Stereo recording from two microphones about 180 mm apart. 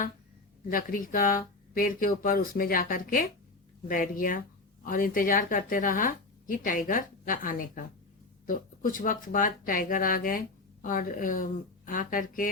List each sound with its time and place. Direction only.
0.7 s speech: 50° left (ahead or behind)